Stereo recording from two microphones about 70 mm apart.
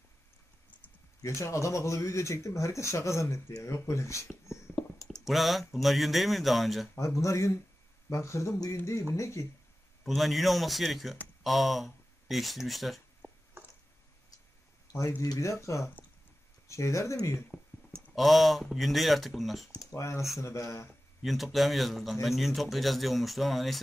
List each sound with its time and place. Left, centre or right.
1.2 s speech: left
5.2 s speech: centre
7.0 s speech: left
10.0 s speech: centre
14.9 s speech: left
18.1 s speech: centre
19.8 s speech: left
21.2 s speech: centre